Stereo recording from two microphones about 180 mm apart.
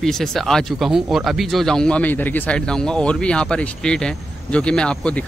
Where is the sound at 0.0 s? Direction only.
Centre (ahead or behind).